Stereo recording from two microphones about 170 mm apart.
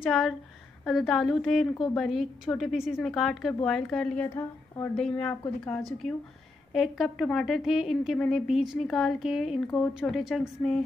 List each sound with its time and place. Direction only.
0.0 s a woman's voice: centre (ahead or behind); by 4.9 s 15° left (ahead or behind)
4.9 s a woman's voice: 5° left (ahead or behind)